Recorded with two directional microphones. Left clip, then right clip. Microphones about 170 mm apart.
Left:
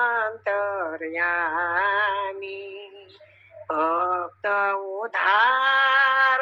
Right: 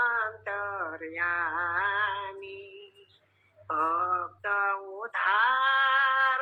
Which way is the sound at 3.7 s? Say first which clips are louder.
Left 4 dB; 40° left (ahead or behind).